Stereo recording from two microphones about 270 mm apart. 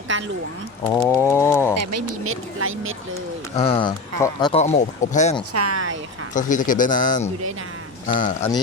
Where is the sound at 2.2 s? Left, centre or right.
Right.